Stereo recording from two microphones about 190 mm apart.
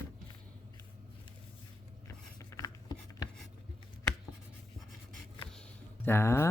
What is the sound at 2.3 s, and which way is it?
Writing, 20° left (ahead or behind).